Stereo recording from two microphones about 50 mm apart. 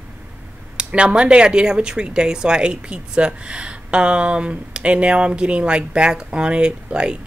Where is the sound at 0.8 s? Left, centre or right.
Right.